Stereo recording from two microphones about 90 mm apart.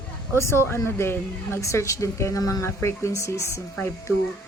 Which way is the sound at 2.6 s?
30° left (ahead or behind).